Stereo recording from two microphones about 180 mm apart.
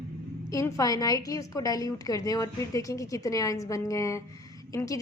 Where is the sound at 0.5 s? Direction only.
20° left (ahead or behind).